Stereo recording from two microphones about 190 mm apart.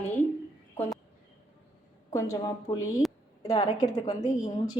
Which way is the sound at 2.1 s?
15° left (ahead or behind).